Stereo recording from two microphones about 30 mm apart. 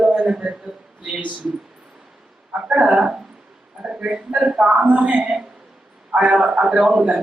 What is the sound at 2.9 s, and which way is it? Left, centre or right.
A man's voice, right.